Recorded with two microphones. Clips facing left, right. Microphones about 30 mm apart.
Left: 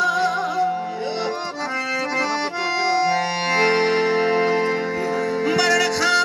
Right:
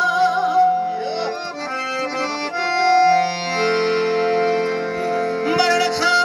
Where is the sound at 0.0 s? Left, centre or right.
Centre.